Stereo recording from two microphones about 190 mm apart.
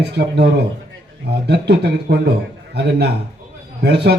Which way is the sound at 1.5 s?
60° right (ahead or behind).